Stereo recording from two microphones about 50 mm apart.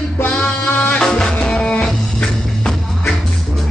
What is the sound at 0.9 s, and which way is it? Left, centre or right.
Music, centre.